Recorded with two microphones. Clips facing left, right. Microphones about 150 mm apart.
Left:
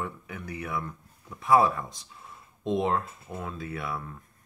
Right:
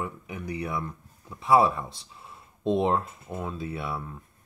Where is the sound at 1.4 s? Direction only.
25° right (ahead or behind).